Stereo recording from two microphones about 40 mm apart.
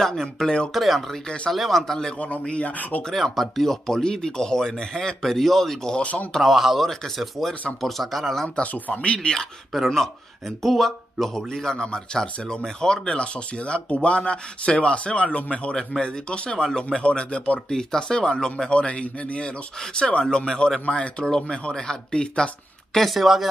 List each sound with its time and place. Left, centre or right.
0.0 s speech: centre
2.1 s speech: left
3.3 s speech: centre
6.4 s speech: centre
8.9 s speech: left
9.7 s speech: centre
18.7 s speech: left
22.9 s speech: centre